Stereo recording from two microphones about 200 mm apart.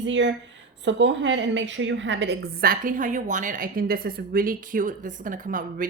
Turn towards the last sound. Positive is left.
turn(degrees=-40)  # may be behind; listen again after turning